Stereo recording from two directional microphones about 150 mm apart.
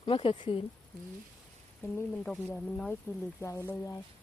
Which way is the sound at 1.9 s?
5° left (ahead or behind).